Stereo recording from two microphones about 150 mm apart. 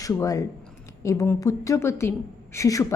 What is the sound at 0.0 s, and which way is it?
A woman's voice, 20° left (ahead or behind).